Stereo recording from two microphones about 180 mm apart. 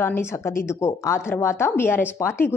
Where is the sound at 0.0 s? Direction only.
15° left (ahead or behind).